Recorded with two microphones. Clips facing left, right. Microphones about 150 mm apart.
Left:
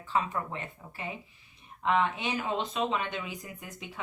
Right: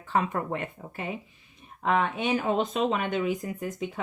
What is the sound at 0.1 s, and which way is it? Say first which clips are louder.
Speech: right 4 dB; 60° right (ahead or behind).